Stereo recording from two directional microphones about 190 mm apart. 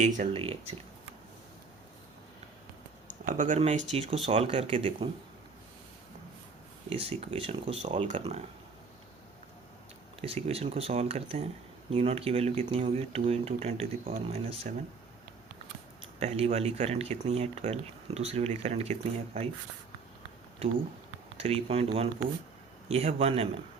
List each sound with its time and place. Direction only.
0.3 s speech: 30° right (ahead or behind)
3.1 s speech: 40° right (ahead or behind)
6.9 s speech: 30° right (ahead or behind)
10.2 s speech: 30° right (ahead or behind)
16.2 s speech: 35° right (ahead or behind)
20.6 s speech: 30° right (ahead or behind)